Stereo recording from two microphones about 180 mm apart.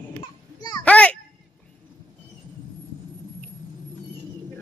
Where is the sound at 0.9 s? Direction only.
5° left (ahead or behind).